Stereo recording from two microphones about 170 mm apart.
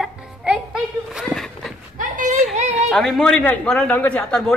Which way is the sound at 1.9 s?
50° right (ahead or behind).